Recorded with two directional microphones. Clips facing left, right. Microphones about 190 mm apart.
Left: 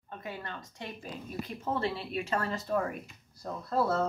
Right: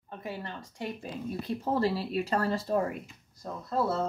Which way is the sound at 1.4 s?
35° right (ahead or behind).